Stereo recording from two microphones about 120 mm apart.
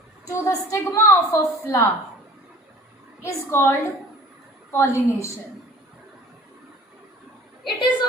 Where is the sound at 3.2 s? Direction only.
20° left (ahead or behind).